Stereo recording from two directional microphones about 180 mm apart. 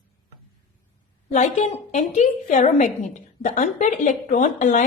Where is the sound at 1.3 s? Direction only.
40° left (ahead or behind).